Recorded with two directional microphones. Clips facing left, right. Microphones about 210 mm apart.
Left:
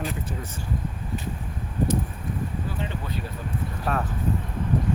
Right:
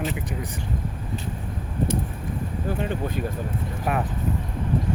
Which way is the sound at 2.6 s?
50° right (ahead or behind).